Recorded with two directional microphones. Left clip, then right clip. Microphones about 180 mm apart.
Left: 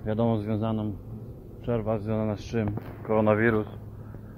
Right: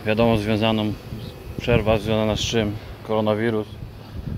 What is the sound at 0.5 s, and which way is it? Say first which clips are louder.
Speech: right 9 dB; 35° right (ahead or behind).